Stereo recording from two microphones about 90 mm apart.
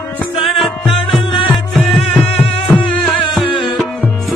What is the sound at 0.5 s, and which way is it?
Music, centre (ahead or behind).